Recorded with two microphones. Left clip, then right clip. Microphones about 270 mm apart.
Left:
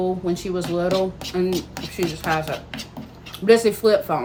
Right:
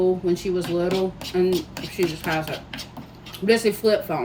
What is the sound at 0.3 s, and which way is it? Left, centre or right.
Speech, centre.